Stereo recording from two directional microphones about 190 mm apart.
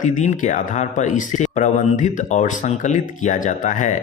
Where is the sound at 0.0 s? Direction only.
40° left (ahead or behind).